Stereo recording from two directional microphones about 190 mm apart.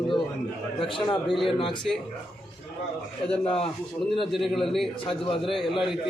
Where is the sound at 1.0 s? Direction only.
25° left (ahead or behind).